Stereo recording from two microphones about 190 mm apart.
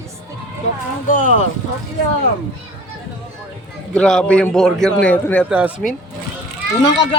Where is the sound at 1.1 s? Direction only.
40° left (ahead or behind).